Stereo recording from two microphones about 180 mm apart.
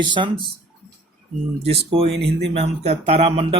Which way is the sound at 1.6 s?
35° right (ahead or behind).